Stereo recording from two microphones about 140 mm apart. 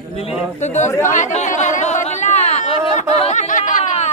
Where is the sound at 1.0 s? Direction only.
60° left (ahead or behind).